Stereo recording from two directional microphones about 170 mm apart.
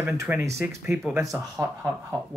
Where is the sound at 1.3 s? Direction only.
15° right (ahead or behind).